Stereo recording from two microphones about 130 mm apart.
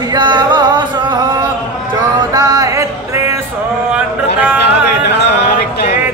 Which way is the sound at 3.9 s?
10° right (ahead or behind).